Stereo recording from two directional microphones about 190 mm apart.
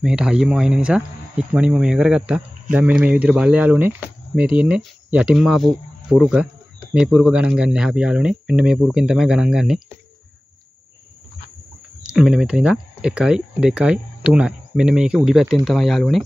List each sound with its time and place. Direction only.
0.0 s speech: 5° right (ahead or behind)
12.0 s speech: 5° right (ahead or behind)